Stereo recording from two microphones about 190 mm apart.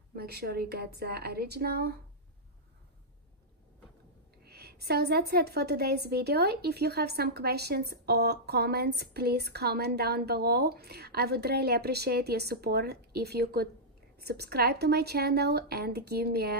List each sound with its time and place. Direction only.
0.1 s a woman's voice: 55° right (ahead or behind)
4.5 s a woman's voice: 55° right (ahead or behind)